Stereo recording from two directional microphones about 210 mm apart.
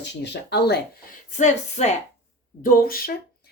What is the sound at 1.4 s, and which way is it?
Speech, 35° left (ahead or behind).